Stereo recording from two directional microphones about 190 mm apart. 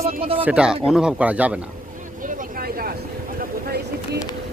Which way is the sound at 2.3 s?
50° right (ahead or behind).